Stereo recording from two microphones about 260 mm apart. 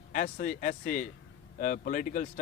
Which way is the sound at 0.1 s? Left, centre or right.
Left.